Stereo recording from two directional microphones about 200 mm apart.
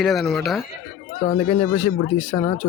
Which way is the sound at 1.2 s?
25° left (ahead or behind).